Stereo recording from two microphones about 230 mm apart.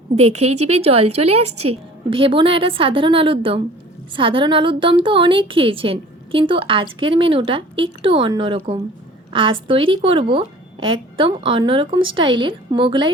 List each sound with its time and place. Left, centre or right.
0.7 s a woman's voice: right